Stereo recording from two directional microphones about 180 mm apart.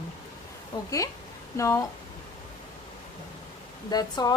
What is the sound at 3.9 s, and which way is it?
Speech, 20° left (ahead or behind).